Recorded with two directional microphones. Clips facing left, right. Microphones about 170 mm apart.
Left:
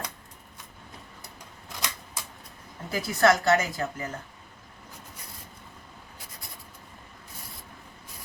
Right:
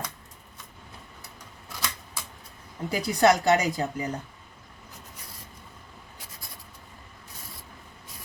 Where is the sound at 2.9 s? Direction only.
15° right (ahead or behind).